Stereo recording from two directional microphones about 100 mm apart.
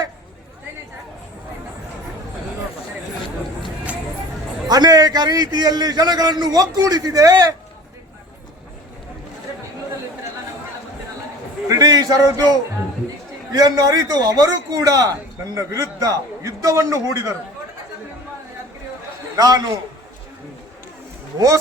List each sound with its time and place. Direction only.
4.7 s a man's voice: 40° right (ahead or behind)
11.7 s a sound: 40° right (ahead or behind)
13.5 s a man's voice: 40° right (ahead or behind)
19.4 s a man's voice: 40° right (ahead or behind)
21.3 s a man's voice: 35° right (ahead or behind)